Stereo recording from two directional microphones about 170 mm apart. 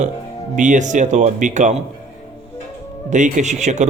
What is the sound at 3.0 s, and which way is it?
Speech, 45° right (ahead or behind).